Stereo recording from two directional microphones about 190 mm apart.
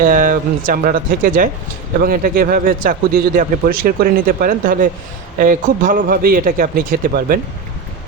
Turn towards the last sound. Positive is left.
turn(degrees=-50)  # may be behind; listen again after turning